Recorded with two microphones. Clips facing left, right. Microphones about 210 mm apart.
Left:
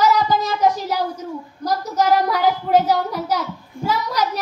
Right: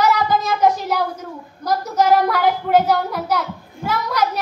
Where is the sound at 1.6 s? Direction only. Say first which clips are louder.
Right 2 dB; 55° right (ahead or behind).